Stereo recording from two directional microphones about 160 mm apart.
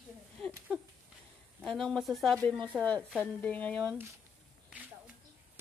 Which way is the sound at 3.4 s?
10° left (ahead or behind).